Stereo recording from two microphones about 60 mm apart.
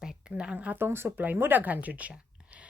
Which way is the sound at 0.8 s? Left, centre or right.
Right.